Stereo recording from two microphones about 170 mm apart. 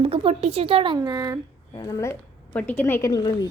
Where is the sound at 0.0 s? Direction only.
35° right (ahead or behind).